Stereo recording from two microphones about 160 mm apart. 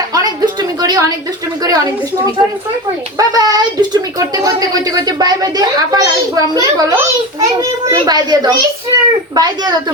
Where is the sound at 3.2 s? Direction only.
25° right (ahead or behind).